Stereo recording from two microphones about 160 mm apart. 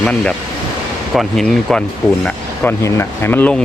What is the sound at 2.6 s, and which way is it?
Speech, 15° left (ahead or behind).